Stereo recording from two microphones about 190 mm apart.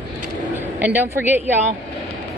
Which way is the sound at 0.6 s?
10° right (ahead or behind).